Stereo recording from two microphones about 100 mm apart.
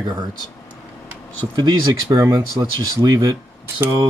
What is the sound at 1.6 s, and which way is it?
Speech, 45° right (ahead or behind).